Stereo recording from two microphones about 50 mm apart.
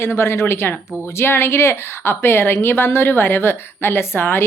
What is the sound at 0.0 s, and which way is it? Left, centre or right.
A woman's voice, left.